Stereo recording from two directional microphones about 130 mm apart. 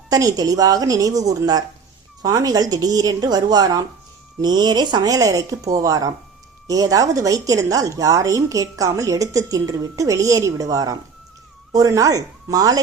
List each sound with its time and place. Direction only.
0.1 s speech: 30° right (ahead or behind)